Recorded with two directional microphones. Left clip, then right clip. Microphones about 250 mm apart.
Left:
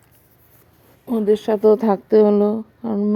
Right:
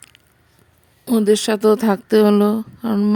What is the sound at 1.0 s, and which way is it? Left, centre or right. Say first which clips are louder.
Speech: right 2 dB; right.